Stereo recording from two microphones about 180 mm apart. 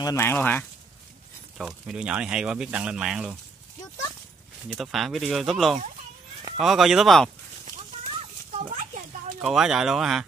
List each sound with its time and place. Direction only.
0.0 s speech: 15° left (ahead or behind)
1.6 s speech: 5° right (ahead or behind)
4.6 s speech: centre (ahead or behind)
8.1 s a sound: 35° right (ahead or behind)
9.4 s speech: centre (ahead or behind)